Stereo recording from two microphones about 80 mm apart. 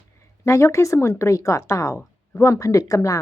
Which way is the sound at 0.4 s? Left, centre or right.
Left.